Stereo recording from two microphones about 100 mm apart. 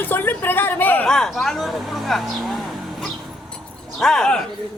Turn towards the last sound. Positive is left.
turn(degrees=5)  # may be behind; listen again after turning